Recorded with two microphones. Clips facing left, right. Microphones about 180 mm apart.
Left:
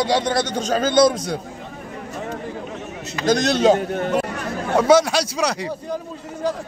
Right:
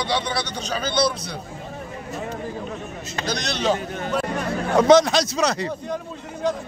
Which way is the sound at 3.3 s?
50° left (ahead or behind).